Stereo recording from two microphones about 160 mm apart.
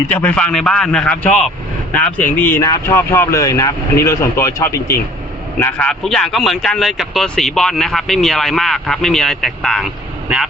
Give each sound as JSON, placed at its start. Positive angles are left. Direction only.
{"t": 0.1, "sound": "speech", "side_deg": 10}